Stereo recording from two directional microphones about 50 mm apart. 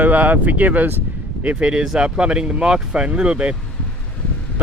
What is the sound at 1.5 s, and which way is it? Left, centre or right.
Speech, right.